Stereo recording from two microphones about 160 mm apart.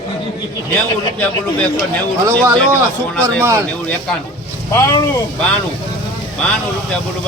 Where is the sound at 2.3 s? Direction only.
15° right (ahead or behind).